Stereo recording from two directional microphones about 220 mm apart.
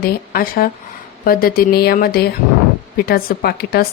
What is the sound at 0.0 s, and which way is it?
A woman's voice, 40° left (ahead or behind).